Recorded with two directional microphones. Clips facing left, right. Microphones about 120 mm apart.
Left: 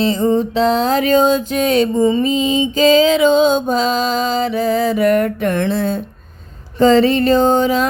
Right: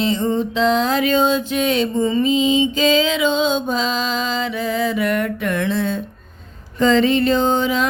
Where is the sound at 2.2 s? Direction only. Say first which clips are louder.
Even; 40° left (ahead or behind).